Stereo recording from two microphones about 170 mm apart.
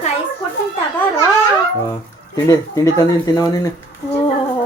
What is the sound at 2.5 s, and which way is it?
Speech, 20° left (ahead or behind).